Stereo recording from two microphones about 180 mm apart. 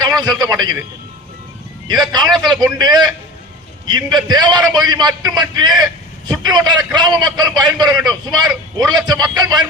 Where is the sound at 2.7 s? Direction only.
25° right (ahead or behind).